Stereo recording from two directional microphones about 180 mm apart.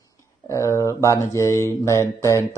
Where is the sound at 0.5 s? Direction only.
15° left (ahead or behind).